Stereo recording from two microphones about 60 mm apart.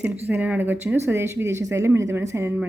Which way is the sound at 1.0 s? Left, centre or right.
Right.